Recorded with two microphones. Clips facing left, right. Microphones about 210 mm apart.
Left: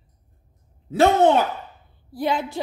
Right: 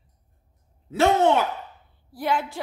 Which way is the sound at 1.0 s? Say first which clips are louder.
Left 3 dB; 35° left (ahead or behind).